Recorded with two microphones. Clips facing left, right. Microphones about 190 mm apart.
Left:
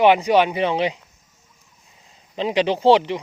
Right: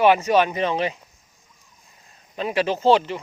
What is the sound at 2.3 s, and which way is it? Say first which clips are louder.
Speech: left 3 dB; 20° left (ahead or behind).